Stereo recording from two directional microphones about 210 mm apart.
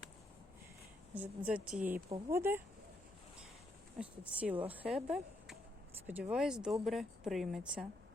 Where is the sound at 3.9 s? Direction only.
5° right (ahead or behind).